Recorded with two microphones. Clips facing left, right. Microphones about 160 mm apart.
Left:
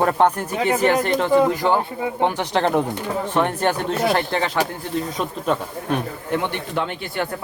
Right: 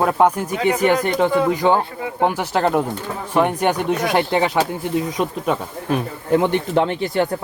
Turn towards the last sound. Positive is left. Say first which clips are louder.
# right 7 dB
turn(degrees=-25)  # may be behind; listen again after turning